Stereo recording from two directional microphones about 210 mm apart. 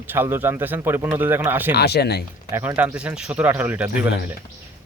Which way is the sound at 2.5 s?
10° right (ahead or behind).